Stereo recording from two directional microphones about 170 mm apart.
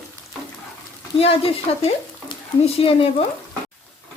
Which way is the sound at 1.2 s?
35° left (ahead or behind).